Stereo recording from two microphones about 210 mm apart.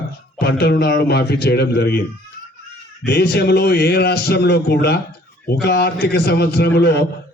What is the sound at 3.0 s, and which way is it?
Speech, 50° left (ahead or behind).